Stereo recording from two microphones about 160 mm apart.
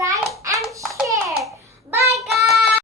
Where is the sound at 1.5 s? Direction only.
15° right (ahead or behind).